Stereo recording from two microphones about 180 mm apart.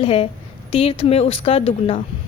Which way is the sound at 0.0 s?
30° left (ahead or behind).